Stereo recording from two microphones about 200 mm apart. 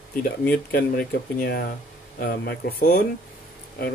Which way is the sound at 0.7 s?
45° left (ahead or behind).